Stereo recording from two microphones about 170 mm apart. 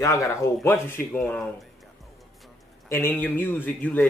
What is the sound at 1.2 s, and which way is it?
Speech, centre (ahead or behind).